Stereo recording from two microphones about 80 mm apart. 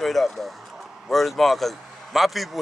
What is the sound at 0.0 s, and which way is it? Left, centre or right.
A man's voice, centre.